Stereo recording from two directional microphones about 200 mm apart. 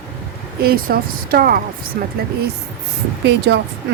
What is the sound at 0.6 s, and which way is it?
Speech, 50° right (ahead or behind).